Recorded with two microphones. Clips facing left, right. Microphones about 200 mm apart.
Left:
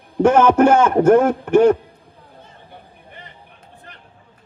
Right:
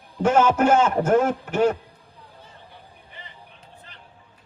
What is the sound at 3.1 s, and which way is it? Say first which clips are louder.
Vehicle: left 5 dB; 55° left (ahead or behind).